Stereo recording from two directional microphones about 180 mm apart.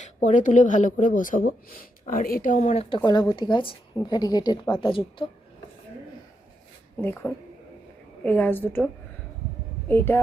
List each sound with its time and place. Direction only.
0.0 s speech: 45° left (ahead or behind)
7.0 s a woman's voice: 10° left (ahead or behind)
9.9 s a woman's voice: 10° left (ahead or behind)